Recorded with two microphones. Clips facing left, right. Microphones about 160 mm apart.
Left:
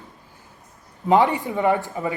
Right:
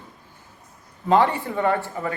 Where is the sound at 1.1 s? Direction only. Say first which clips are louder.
Left 1 dB; 15° left (ahead or behind).